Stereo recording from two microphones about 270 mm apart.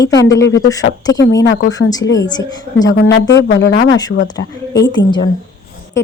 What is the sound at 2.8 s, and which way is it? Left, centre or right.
Speech, left.